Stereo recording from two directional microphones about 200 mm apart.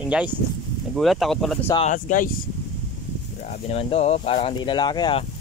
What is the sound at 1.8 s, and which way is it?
Speech, 40° left (ahead or behind).